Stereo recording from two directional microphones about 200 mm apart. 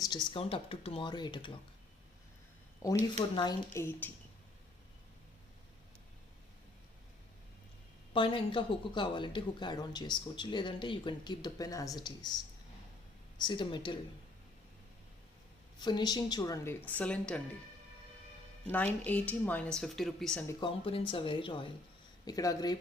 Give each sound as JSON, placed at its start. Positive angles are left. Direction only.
{"t": 0.0, "sound": "speech", "side_deg": 20}
{"t": 2.8, "sound": "a woman's voice", "side_deg": 15}
{"t": 8.1, "sound": "speech", "side_deg": 25}
{"t": 13.4, "sound": "speech", "side_deg": 25}
{"t": 15.8, "sound": "a woman's voice", "side_deg": 20}
{"t": 19.0, "sound": "speech", "side_deg": 10}
{"t": 20.5, "sound": "speech", "side_deg": 25}